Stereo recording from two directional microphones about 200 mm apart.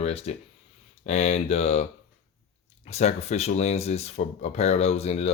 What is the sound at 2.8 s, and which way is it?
Speech, 35° left (ahead or behind).